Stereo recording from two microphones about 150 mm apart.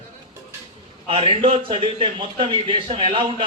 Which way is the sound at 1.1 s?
35° right (ahead or behind).